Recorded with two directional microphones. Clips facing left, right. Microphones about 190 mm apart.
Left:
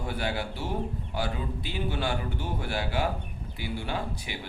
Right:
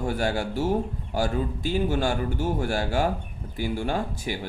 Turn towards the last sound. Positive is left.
turn(degrees=-45)  # may be behind; listen again after turning